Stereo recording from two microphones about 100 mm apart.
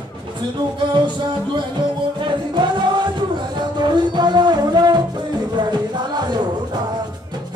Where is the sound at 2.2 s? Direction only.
50° right (ahead or behind).